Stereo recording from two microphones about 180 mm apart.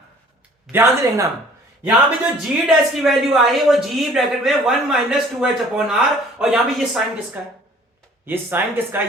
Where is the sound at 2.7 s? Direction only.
Centre (ahead or behind).